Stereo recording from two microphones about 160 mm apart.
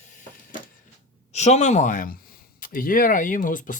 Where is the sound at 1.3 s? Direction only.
45° left (ahead or behind).